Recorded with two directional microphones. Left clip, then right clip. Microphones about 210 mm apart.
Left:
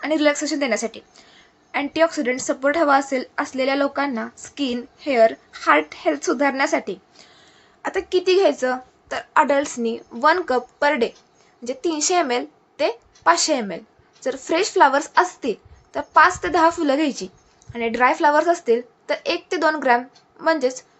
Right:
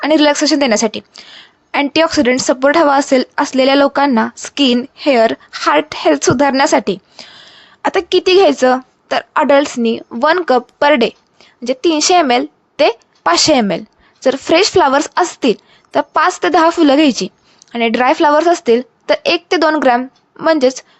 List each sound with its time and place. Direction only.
0.0 s a woman's voice: 50° right (ahead or behind)